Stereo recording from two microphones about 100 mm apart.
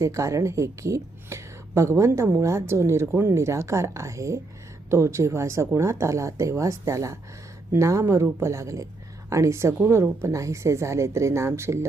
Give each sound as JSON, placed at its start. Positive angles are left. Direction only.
{"t": 0.0, "sound": "a woman's voice", "side_deg": -30}